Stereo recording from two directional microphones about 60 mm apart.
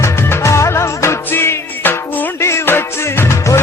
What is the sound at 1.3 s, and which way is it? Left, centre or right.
Music, left.